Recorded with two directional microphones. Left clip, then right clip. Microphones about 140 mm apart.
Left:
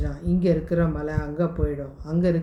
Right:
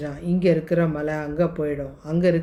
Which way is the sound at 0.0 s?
40° right (ahead or behind).